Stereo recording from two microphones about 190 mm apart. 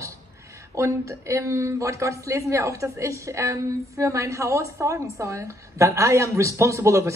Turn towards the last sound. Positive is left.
turn(degrees=-15)  # may be behind; listen again after turning